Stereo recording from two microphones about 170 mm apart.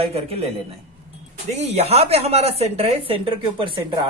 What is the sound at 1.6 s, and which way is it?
Speech, 40° right (ahead or behind).